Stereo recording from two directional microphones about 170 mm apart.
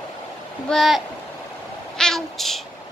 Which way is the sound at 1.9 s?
5° left (ahead or behind).